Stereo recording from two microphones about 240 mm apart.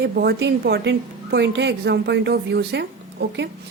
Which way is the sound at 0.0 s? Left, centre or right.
Right.